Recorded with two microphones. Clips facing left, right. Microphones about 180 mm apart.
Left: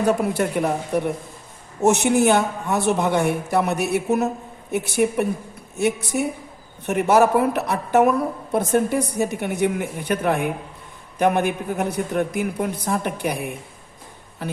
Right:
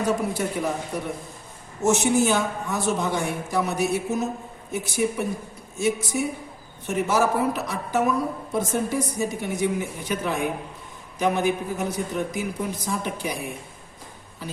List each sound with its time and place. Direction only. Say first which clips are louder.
0.0 s a man's voice: left 4 dB; 60° left (ahead or behind)